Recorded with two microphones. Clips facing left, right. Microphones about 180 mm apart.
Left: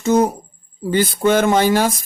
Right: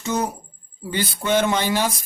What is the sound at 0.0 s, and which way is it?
A woman's voice, 50° left (ahead or behind).